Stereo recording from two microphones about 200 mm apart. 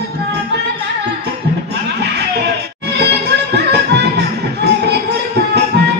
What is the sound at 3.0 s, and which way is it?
Music, 55° right (ahead or behind).